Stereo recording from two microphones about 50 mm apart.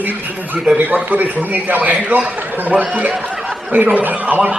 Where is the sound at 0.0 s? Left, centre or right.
Right.